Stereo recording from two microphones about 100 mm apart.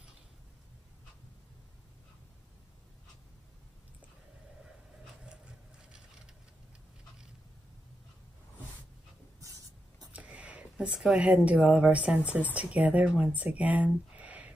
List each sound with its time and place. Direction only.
5.2 s a sound: 10° right (ahead or behind)
9.4 s spray: 35° right (ahead or behind)
10.1 s speech: 10° right (ahead or behind)